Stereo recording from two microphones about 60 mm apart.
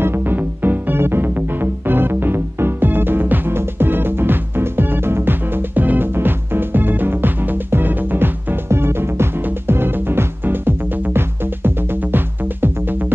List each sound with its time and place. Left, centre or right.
0.0 s music: right